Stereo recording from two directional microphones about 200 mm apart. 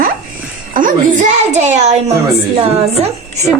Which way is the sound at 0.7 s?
40° right (ahead or behind).